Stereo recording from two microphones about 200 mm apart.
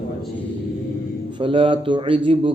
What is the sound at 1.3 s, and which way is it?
Speech, 25° right (ahead or behind).